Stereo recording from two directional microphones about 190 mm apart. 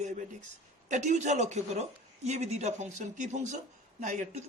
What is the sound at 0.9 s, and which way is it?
Speech, 40° right (ahead or behind).